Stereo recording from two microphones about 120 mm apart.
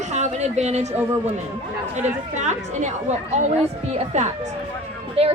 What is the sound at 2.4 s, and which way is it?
Speech, 75° right (ahead or behind).